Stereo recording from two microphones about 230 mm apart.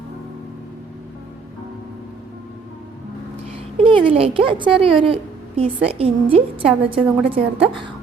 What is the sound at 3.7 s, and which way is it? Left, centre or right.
A woman's voice, right.